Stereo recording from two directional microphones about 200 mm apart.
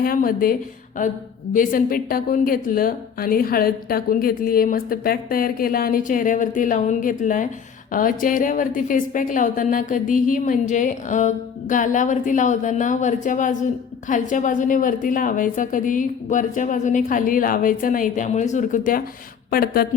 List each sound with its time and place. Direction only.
0.0 s a woman's voice: 45° left (ahead or behind)
1.5 s a woman's voice: 45° left (ahead or behind)